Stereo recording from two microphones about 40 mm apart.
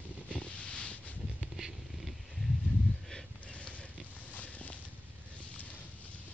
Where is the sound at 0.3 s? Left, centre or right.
Left.